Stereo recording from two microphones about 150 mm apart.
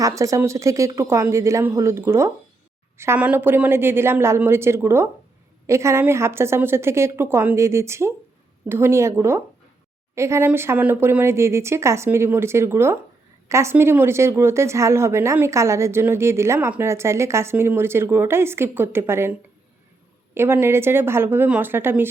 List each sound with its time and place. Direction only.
0.2 s a woman's voice: 20° right (ahead or behind)
20.3 s speech: 15° right (ahead or behind)